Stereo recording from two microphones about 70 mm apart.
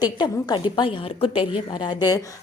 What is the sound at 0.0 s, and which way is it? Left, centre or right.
Speech, left.